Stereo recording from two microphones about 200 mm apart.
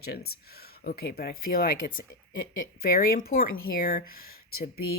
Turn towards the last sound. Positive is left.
turn(degrees=50)  # may be behind; listen again after turning